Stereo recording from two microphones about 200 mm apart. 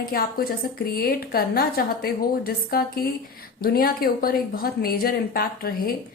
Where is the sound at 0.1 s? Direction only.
50° left (ahead or behind).